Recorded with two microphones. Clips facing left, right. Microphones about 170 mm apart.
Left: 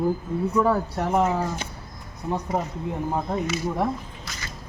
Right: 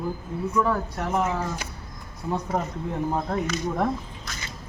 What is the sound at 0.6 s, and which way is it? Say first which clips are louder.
Speech: left 2 dB; 35° left (ahead or behind).